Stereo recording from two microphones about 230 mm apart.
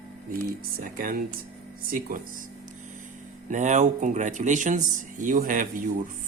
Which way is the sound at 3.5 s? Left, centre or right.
Right.